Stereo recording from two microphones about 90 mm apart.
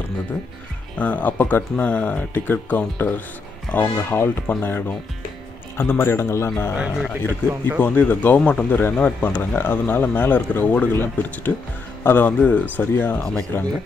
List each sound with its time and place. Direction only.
0.9 s speech: 15° left (ahead or behind)
7.8 s speech: 20° left (ahead or behind)
13.2 s speech: 10° left (ahead or behind)